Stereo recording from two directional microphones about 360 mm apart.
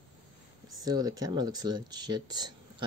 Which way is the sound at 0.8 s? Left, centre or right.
Centre.